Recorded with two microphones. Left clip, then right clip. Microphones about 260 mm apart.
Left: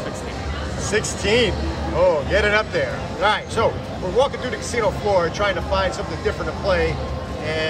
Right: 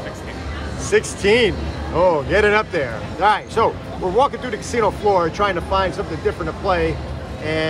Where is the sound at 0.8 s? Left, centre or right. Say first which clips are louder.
Right 5 dB; right.